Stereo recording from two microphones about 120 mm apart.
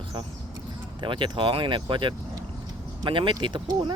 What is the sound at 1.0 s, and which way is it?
Speech, 40° right (ahead or behind).